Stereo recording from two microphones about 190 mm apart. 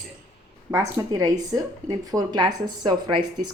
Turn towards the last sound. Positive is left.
turn(degrees=-25)  # may be behind; listen again after turning